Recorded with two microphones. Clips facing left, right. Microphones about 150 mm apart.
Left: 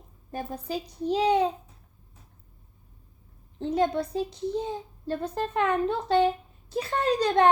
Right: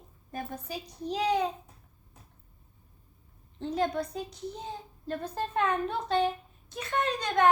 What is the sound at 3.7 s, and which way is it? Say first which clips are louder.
A child's voice: left 4 dB; 25° left (ahead or behind).